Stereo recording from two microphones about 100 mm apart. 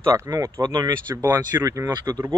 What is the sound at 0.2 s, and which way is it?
Speech, 30° right (ahead or behind).